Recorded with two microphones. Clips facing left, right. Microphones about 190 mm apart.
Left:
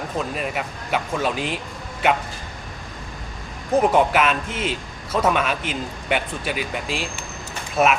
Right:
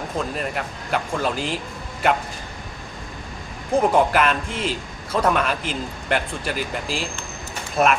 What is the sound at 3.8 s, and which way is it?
A man's voice, centre (ahead or behind).